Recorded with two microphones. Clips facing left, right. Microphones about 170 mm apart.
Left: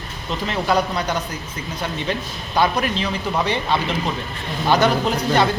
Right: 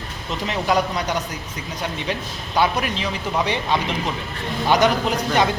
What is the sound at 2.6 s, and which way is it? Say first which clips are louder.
Speech: left 1 dB; 10° right (ahead or behind).